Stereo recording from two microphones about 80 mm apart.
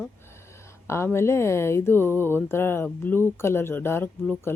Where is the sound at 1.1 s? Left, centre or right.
Left.